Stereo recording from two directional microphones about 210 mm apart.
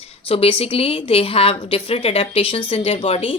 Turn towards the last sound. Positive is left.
turn(degrees=25)  # may be behind; listen again after turning